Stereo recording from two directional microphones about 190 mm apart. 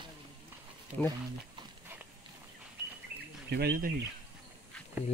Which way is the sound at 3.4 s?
60° right (ahead or behind).